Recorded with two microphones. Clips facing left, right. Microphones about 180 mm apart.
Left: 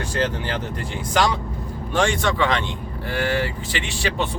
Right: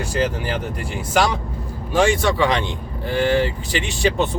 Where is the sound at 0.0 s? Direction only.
10° right (ahead or behind).